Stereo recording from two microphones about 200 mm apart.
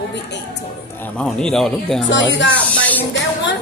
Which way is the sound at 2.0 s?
65° left (ahead or behind).